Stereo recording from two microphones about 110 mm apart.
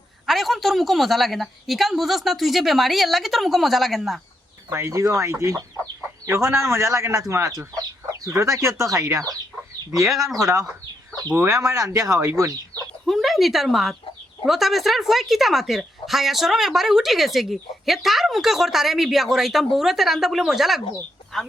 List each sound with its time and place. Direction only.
0.3 s speech: centre (ahead or behind)
4.7 s speech: 25° right (ahead or behind)
9.9 s speech: centre (ahead or behind)
11.3 s speech: 30° right (ahead or behind)
13.1 s speech: centre (ahead or behind)